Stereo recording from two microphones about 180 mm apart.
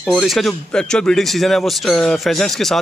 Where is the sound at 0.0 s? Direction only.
Centre (ahead or behind).